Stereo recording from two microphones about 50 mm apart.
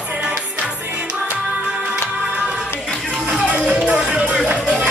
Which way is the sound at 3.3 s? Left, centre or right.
Right.